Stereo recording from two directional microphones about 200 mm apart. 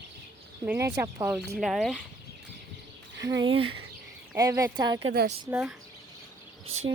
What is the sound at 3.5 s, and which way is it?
A woman's voice, 25° right (ahead or behind).